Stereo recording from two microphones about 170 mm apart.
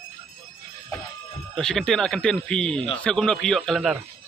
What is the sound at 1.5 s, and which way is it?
A man's voice, 5° left (ahead or behind).